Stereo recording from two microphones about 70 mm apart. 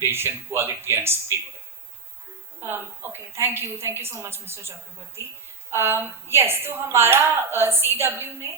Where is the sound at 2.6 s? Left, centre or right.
Right.